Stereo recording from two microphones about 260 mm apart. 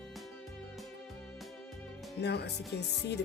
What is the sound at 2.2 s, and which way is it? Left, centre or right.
Speech, left.